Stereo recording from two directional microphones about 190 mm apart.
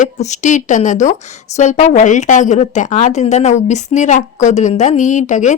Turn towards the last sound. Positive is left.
turn(degrees=40)  # may be behind; listen again after turning